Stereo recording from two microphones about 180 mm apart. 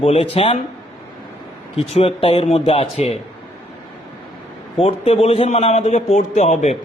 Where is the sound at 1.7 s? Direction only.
35° left (ahead or behind).